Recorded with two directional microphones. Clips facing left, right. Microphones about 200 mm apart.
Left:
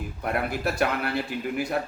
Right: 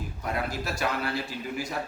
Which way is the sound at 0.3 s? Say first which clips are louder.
Left 4 dB; 60° left (ahead or behind).